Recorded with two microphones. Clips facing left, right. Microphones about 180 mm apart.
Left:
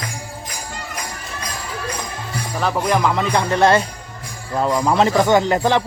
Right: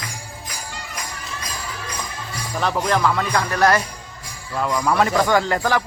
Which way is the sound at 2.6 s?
15° left (ahead or behind).